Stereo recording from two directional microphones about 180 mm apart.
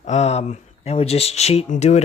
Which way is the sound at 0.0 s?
40° left (ahead or behind).